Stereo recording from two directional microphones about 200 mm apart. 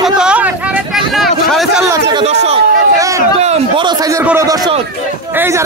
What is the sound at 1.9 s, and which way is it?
Speech, 20° right (ahead or behind).